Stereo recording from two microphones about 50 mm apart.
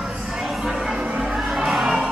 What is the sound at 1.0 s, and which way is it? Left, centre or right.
Music, right.